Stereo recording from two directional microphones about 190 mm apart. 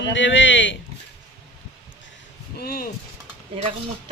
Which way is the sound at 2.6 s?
50° left (ahead or behind).